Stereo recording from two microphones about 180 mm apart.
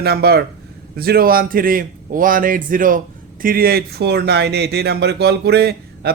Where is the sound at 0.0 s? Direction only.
60° right (ahead or behind).